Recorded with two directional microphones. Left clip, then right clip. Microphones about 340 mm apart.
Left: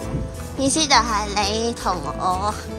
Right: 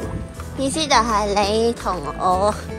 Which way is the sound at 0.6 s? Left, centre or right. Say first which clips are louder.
Even; centre.